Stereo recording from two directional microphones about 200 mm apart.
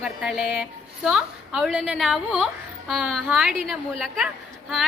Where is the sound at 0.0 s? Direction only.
5° right (ahead or behind).